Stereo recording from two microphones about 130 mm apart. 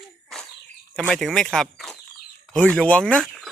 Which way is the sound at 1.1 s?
Centre (ahead or behind).